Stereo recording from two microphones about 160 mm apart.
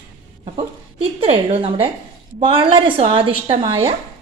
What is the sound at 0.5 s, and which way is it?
A woman's voice, 35° right (ahead or behind).